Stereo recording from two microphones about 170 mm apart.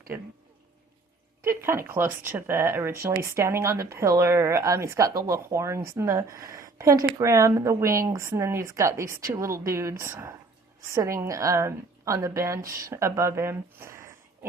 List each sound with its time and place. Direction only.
0.1 s speech: 10° right (ahead or behind)
1.4 s a woman's voice: 15° right (ahead or behind)